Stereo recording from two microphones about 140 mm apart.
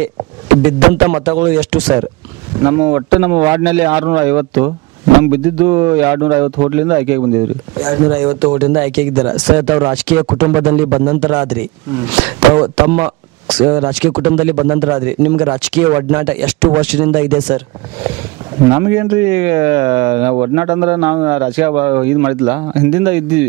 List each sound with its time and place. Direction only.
0.6 s speech: 15° right (ahead or behind)
18.7 s speech: 20° right (ahead or behind)